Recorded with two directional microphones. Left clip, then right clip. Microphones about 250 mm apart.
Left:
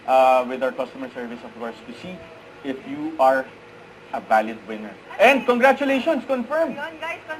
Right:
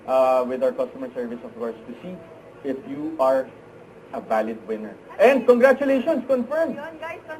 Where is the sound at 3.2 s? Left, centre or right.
Centre.